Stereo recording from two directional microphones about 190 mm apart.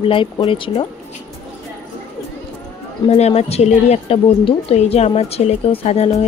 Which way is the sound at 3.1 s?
35° left (ahead or behind).